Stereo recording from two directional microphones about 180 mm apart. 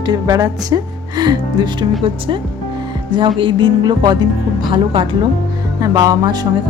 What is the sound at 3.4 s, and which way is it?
Speech, 25° right (ahead or behind).